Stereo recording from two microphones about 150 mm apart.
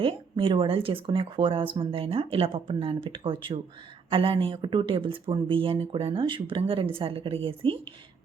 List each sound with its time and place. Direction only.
0.0 s speech: 35° right (ahead or behind)